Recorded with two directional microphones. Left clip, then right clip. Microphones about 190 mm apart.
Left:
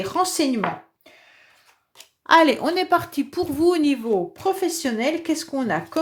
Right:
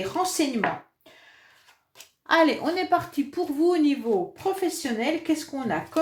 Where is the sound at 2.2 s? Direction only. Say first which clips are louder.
Left 5 dB; 45° left (ahead or behind).